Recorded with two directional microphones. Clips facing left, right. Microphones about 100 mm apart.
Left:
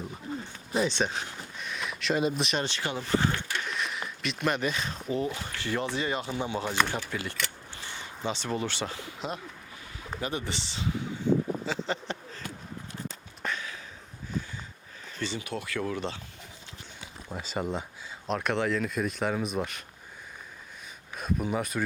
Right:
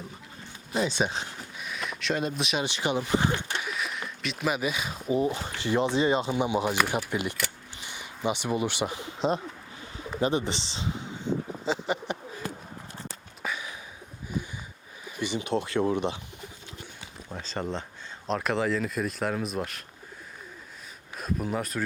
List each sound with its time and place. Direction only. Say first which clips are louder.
0.7 s speech: even; 5° right (ahead or behind)
1.5 s a sound: right 1 dB; 5° right (ahead or behind)
2.6 s speech: right 4 dB; 15° right (ahead or behind)
3.6 s speech: even; 5° right (ahead or behind); by 11.1 s 25° right (ahead or behind)
11.6 s a sound: right 3 dB; 15° right (ahead or behind)
13.4 s a sound: even; 10° right (ahead or behind)
15.0 s speech: right 3 dB; 15° right (ahead or behind)
17.2 s speech: left 1 dB; 5° left (ahead or behind)
21.2 s speech: even; centre (ahead or behind)